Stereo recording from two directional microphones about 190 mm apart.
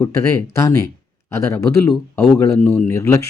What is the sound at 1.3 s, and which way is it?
Speech, 15° left (ahead or behind).